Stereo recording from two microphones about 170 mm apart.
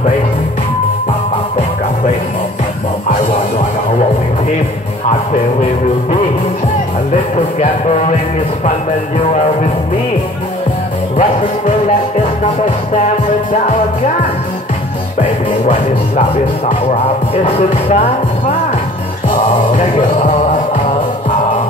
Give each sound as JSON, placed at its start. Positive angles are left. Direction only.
{"t": 7.3, "sound": "music", "side_deg": 40}
{"t": 15.1, "sound": "speech", "side_deg": 50}
{"t": 19.7, "sound": "speech", "side_deg": 45}